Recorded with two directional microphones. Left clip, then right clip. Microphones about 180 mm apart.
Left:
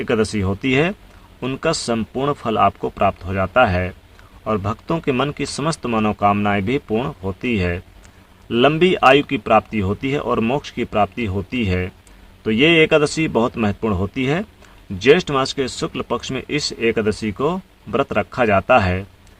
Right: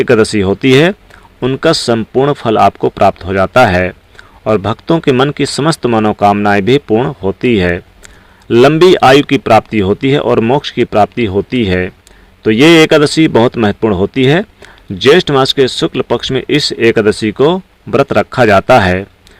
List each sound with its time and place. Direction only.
0.0 s a man's voice: 35° right (ahead or behind)